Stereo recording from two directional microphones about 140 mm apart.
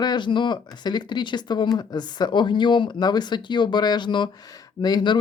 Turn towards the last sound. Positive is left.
turn(degrees=30)  # may be behind; listen again after turning